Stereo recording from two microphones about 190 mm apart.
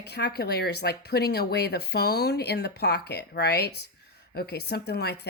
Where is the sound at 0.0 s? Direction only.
60° left (ahead or behind).